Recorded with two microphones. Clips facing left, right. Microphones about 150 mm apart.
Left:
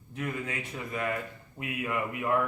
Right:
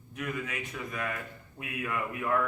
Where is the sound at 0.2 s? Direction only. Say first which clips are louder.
Left 1 dB; 30° left (ahead or behind).